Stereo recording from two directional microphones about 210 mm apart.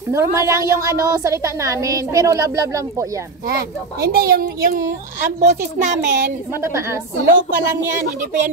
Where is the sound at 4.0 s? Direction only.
45° right (ahead or behind).